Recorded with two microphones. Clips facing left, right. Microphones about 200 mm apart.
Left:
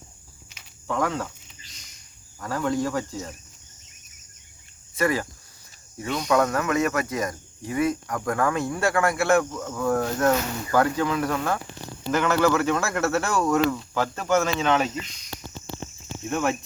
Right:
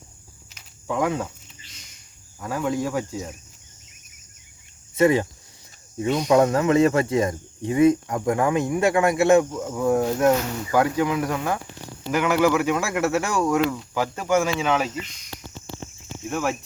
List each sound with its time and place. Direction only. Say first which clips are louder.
0.9 s speech: right 2 dB; 15° right (ahead or behind)
2.4 s speech: even; 10° right (ahead or behind)
4.9 s speech: right 6 dB; 20° right (ahead or behind); by 14.9 s 5° right (ahead or behind)
16.3 s speech: left 1 dB; 5° right (ahead or behind)